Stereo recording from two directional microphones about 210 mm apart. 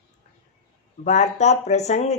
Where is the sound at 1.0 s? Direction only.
35° left (ahead or behind).